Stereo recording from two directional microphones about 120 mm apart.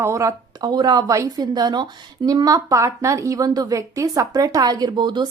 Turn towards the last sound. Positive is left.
turn(degrees=-40)  # may be behind; listen again after turning